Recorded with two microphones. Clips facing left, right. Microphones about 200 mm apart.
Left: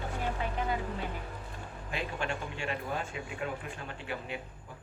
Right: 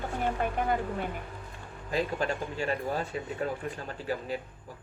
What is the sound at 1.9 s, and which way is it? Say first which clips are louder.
Speech: right 6 dB; 40° right (ahead or behind).